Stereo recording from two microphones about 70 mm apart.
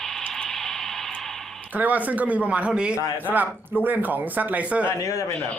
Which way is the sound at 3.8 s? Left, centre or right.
Right.